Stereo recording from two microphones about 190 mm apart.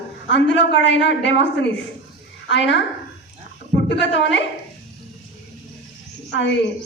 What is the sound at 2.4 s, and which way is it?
Speech, 70° left (ahead or behind).